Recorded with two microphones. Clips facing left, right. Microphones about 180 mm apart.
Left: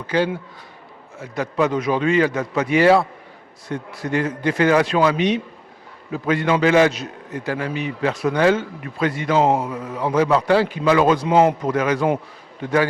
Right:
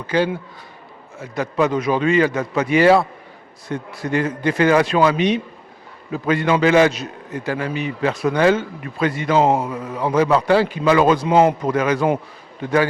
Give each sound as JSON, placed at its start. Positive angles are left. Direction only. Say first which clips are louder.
{"t": 1.4, "sound": "a man's voice", "louder": "right 1 dB", "side_deg": -15}